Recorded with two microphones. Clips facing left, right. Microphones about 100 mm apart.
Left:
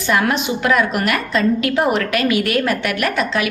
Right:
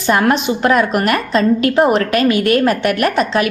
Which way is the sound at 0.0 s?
40° right (ahead or behind).